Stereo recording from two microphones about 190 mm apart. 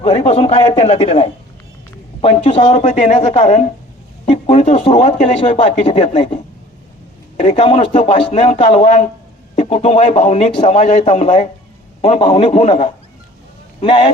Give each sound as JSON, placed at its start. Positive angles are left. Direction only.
{"t": 0.0, "sound": "speech", "side_deg": 30}